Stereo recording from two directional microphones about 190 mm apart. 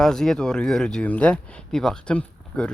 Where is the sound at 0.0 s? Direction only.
Centre (ahead or behind).